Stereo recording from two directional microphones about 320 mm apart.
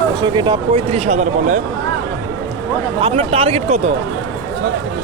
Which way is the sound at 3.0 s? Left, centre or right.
Centre.